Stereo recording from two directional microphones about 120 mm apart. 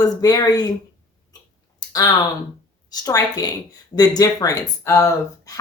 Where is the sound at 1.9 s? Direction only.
35° left (ahead or behind).